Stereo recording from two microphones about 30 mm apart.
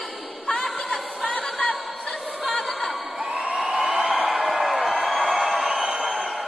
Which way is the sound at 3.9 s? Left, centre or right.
Right.